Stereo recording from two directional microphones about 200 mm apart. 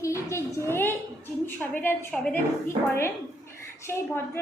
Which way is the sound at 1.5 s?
10° left (ahead or behind).